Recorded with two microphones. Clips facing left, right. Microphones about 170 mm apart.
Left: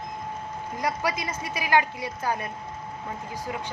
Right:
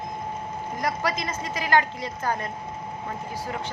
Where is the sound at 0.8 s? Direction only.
10° left (ahead or behind).